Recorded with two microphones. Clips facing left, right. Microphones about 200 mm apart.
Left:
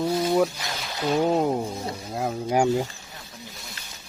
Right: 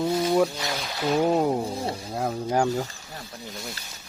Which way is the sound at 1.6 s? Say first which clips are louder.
Right 2 dB; 30° right (ahead or behind).